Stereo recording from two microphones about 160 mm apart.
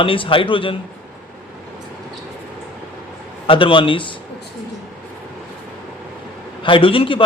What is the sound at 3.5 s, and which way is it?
Speech, 30° left (ahead or behind).